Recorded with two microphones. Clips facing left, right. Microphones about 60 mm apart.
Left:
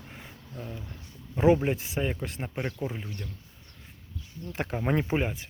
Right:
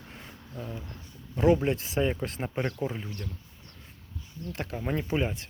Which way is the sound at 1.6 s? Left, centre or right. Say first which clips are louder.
Right 2 dB; centre.